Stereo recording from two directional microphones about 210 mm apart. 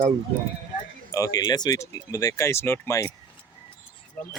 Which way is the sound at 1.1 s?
15° left (ahead or behind).